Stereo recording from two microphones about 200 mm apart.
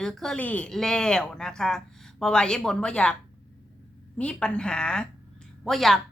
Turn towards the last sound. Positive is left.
turn(degrees=0)  # may be behind; listen again after turning